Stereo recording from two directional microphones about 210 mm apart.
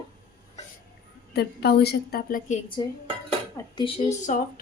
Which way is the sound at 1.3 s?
50° left (ahead or behind).